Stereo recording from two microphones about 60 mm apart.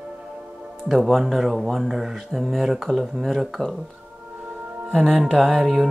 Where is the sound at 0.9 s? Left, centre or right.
Centre.